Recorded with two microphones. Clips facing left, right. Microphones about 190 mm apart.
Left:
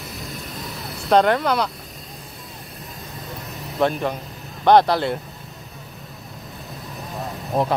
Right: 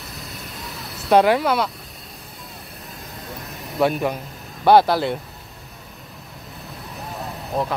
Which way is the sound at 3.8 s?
10° right (ahead or behind).